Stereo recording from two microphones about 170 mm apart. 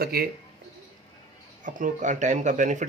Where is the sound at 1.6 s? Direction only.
50° right (ahead or behind).